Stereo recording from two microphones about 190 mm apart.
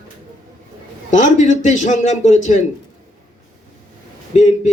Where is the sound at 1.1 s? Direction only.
40° left (ahead or behind).